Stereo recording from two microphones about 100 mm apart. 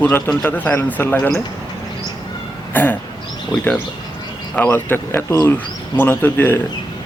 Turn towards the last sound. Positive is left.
turn(degrees=20)  # may be behind; listen again after turning